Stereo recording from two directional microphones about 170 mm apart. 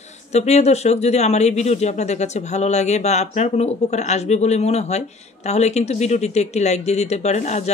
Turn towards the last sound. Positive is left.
turn(degrees=40)  # may be behind; listen again after turning